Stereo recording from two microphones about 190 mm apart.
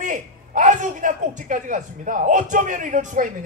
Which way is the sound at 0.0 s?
40° right (ahead or behind).